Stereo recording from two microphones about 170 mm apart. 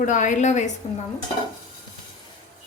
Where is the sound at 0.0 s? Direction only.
50° left (ahead or behind).